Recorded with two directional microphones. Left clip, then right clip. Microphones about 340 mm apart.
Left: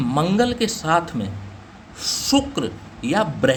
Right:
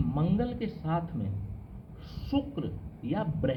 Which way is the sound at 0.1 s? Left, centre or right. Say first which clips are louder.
Left 15 dB; left.